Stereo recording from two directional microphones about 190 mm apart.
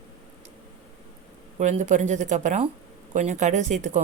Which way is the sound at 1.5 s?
40° right (ahead or behind).